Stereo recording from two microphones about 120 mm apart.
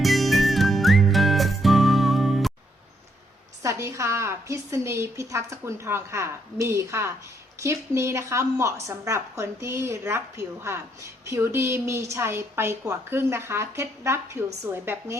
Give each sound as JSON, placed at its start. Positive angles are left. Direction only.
{"t": 0.0, "sound": "music", "side_deg": 0}
{"t": 3.6, "sound": "a woman's voice", "side_deg": -25}